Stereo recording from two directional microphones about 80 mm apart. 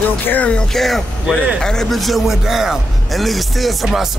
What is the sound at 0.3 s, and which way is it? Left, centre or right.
Music, centre.